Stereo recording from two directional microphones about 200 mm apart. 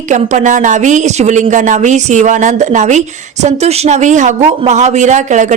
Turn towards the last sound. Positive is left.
turn(degrees=-35)  # may be behind; listen again after turning